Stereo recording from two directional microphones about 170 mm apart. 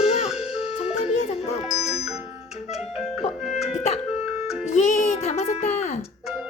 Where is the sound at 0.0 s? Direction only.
35° left (ahead or behind).